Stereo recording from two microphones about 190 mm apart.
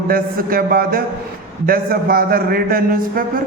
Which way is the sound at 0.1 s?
50° right (ahead or behind).